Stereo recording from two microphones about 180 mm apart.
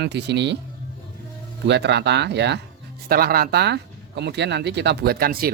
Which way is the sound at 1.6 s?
70° right (ahead or behind).